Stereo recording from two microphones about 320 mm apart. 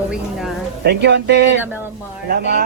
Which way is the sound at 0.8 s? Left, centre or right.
Right.